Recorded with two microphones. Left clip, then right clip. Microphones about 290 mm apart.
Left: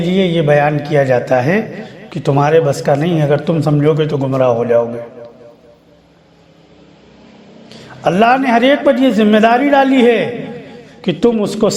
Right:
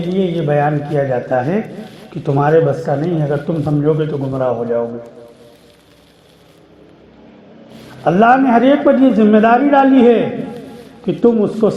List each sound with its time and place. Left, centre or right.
0.1 s a man's voice: left
8.0 s a man's voice: left